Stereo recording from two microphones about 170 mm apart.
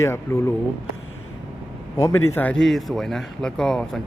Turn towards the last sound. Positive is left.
turn(degrees=5)  # may be behind; listen again after turning